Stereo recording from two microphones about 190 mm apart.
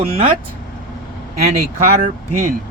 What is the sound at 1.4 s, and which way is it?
Speech, 40° right (ahead or behind).